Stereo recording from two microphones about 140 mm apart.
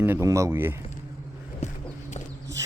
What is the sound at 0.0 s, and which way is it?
Speech, 15° right (ahead or behind).